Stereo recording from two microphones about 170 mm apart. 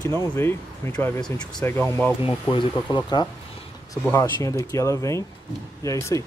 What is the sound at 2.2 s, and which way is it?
Speech, 30° left (ahead or behind).